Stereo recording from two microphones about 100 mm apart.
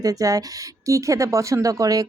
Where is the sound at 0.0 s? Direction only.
35° right (ahead or behind).